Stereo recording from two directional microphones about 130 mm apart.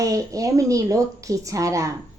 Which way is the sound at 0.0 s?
25° right (ahead or behind).